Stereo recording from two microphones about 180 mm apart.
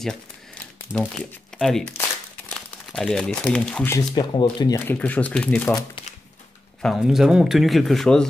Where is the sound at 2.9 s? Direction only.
5° left (ahead or behind).